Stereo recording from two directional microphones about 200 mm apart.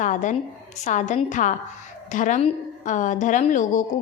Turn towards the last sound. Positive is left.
turn(degrees=40)  # may be behind; listen again after turning